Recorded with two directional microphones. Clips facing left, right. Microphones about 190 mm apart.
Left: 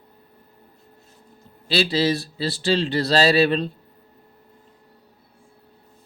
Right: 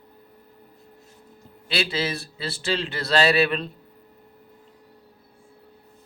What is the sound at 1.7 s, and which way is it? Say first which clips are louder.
A man's voice: left 6 dB; 35° left (ahead or behind).